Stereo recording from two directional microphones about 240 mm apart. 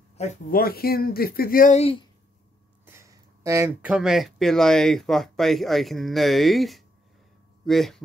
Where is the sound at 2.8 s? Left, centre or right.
Centre.